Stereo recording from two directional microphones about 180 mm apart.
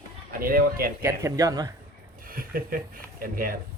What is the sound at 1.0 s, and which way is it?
Speech, 15° right (ahead or behind).